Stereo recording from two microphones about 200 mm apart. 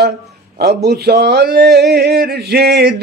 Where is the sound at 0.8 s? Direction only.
55° right (ahead or behind).